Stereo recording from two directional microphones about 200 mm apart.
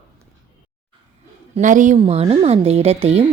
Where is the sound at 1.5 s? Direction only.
40° right (ahead or behind).